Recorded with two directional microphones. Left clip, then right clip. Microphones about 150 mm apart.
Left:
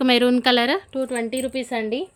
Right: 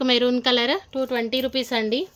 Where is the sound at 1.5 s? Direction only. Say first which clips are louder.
Right 2 dB; 15° right (ahead or behind).